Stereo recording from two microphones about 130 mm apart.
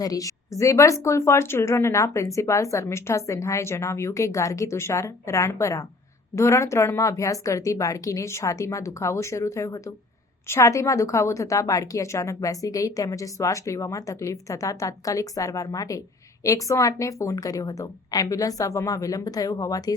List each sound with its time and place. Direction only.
0.0 s a woman's voice: 25° left (ahead or behind)